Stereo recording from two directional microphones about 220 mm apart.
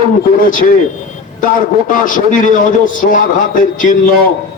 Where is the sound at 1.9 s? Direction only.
35° left (ahead or behind).